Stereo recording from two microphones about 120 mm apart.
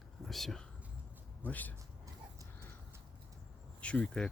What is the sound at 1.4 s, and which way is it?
Speech, 15° left (ahead or behind).